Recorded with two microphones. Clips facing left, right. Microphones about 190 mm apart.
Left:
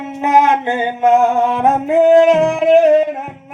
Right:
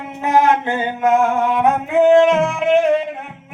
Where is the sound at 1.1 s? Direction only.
35° left (ahead or behind).